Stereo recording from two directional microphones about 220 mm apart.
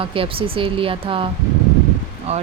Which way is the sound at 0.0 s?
25° right (ahead or behind).